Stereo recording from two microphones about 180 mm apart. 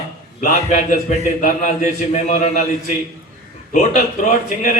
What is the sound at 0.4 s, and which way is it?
A man's voice, 45° left (ahead or behind).